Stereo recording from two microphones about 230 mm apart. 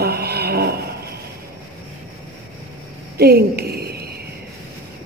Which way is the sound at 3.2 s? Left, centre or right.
Right.